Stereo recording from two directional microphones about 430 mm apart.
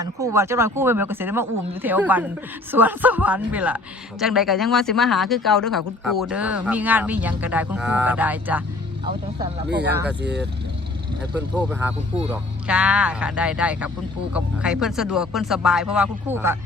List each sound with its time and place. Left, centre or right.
0.0 s speech: centre
9.6 s speech: right
9.9 s speech: centre
11.5 s speech: centre